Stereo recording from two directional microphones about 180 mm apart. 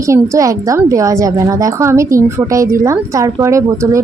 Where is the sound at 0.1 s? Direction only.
20° right (ahead or behind).